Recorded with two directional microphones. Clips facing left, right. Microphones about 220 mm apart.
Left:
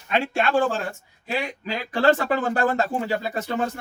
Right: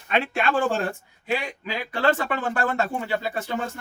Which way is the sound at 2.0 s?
35° left (ahead or behind).